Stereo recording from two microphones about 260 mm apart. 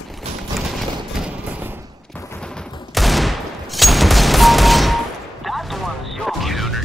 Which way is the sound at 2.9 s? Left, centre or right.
Centre.